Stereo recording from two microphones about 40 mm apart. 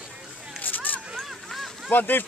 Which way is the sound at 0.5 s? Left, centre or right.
Left.